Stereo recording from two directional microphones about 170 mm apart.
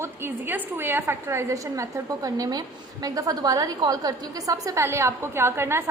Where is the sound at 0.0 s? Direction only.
15° right (ahead or behind).